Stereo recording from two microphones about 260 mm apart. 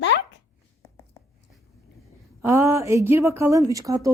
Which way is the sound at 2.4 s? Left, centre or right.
Centre.